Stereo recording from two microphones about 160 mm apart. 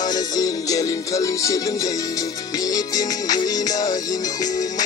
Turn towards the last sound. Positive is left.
turn(degrees=25)  # may be behind; listen again after turning